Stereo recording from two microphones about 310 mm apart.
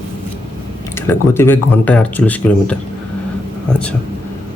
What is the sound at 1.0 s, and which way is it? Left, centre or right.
A man's voice, centre.